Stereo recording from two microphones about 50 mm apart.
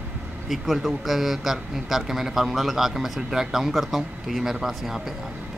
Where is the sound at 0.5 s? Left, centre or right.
Centre.